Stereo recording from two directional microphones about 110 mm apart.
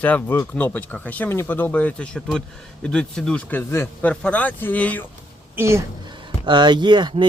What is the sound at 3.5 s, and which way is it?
Speech, 25° left (ahead or behind).